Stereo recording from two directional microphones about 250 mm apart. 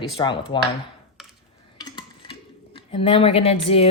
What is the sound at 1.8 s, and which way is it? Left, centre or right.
Dishes, centre.